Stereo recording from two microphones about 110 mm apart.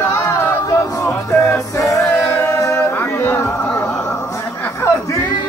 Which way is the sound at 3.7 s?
5° left (ahead or behind).